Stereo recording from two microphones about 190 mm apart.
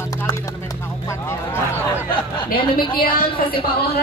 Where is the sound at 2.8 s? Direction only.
25° left (ahead or behind).